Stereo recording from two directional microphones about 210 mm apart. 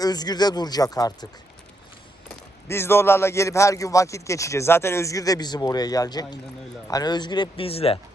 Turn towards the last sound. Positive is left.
turn(degrees=30)  # may be behind; listen again after turning